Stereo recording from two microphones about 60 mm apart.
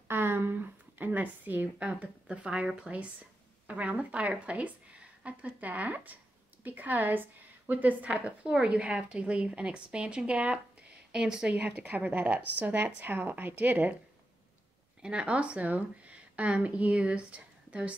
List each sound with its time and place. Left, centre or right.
0.1 s a sound: right
1.8 s a woman's voice: centre
11.5 s a woman's voice: right
15.0 s a woman's voice: centre